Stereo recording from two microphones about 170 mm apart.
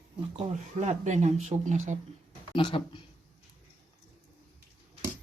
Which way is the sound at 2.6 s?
30° left (ahead or behind).